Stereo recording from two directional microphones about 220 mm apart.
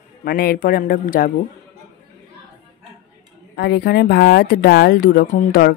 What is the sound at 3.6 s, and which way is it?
Speech, 50° left (ahead or behind).